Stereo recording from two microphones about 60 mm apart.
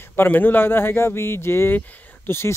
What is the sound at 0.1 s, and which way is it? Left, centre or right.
Speech, left.